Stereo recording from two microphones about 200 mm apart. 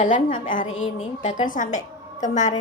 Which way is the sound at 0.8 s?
30° left (ahead or behind).